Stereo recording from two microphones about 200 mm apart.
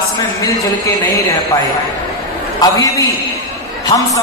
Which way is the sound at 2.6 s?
15° left (ahead or behind).